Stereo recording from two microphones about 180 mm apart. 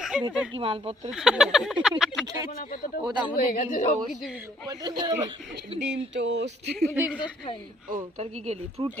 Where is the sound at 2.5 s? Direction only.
55° left (ahead or behind).